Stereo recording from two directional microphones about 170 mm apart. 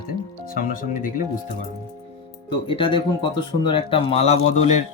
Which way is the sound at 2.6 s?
30° left (ahead or behind).